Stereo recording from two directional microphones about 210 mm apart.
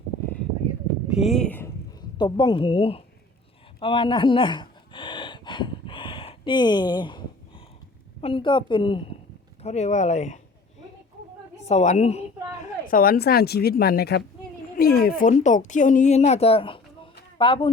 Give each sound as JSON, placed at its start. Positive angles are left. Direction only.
{"t": 1.2, "sound": "speech", "side_deg": 0}
{"t": 3.8, "sound": "a sound", "side_deg": 25}
{"t": 8.2, "sound": "a woman's voice", "side_deg": 25}
{"t": 11.7, "sound": "a woman's voice", "side_deg": 35}
{"t": 12.9, "sound": "a woman's voice", "side_deg": 45}
{"t": 15.2, "sound": "a woman's voice", "side_deg": 35}